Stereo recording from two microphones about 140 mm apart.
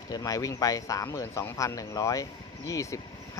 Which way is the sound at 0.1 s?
25° left (ahead or behind).